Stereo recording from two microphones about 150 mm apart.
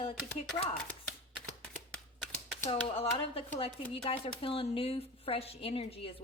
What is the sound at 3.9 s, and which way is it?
Speech, 40° left (ahead or behind).